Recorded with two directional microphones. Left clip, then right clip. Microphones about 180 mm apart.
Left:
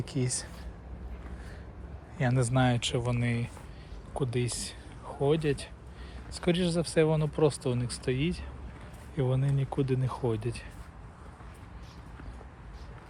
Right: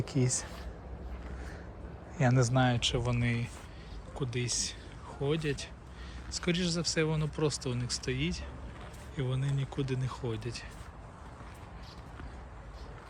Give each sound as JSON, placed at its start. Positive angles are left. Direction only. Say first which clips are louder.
{"t": 0.0, "sound": "speech", "louder": "right 1 dB", "side_deg": -55}
{"t": 2.4, "sound": "speech", "louder": "left 2 dB", "side_deg": -15}
{"t": 4.1, "sound": "speech", "louder": "left 3 dB", "side_deg": 0}